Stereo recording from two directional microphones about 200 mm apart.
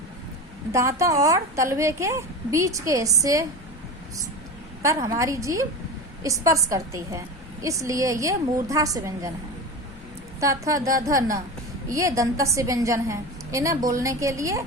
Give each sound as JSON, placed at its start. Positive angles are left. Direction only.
{"t": 0.7, "sound": "a woman's voice", "side_deg": -15}
{"t": 4.8, "sound": "a woman's voice", "side_deg": -15}
{"t": 10.4, "sound": "a woman's voice", "side_deg": -15}